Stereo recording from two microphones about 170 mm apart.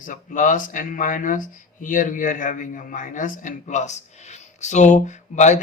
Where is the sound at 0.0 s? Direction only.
50° left (ahead or behind).